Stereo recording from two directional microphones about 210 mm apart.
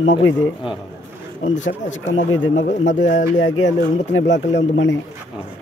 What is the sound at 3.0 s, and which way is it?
Speech, 40° left (ahead or behind).